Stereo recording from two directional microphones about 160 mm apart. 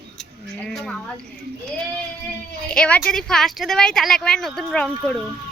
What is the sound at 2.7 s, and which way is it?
Speech, 5° left (ahead or behind).